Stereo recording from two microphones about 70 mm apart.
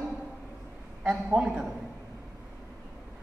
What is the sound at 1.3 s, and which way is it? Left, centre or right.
Speech, centre.